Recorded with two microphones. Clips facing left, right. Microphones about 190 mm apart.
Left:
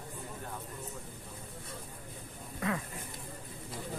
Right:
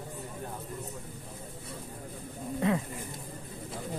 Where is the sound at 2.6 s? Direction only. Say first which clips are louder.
Right 6 dB; 25° right (ahead or behind).